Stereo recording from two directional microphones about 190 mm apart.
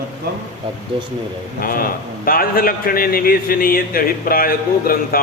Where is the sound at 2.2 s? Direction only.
50° left (ahead or behind).